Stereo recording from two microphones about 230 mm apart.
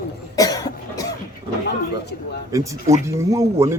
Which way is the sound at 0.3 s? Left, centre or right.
Centre.